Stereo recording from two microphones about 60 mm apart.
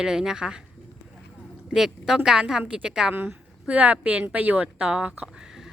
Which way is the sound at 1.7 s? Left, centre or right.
Centre.